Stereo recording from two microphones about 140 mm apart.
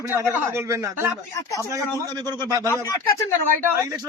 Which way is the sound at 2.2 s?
30° right (ahead or behind).